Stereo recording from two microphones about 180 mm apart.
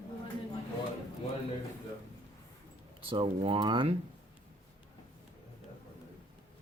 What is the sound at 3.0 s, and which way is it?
Speech, 30° right (ahead or behind).